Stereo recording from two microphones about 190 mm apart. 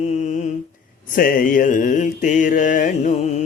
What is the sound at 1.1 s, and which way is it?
Mantra, 50° left (ahead or behind).